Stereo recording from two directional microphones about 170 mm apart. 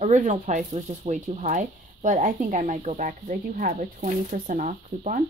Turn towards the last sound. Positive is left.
turn(degrees=-50)  # may be behind; listen again after turning